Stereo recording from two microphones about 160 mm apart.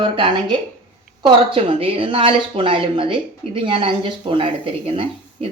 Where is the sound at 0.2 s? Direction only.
30° right (ahead or behind).